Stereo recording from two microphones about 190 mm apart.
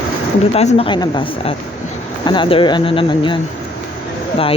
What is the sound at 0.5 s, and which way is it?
Speech, 30° left (ahead or behind).